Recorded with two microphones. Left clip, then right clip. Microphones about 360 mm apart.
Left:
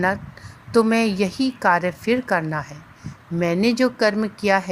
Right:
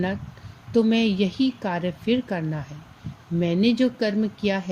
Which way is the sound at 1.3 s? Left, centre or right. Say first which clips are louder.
Left 1 dB; centre.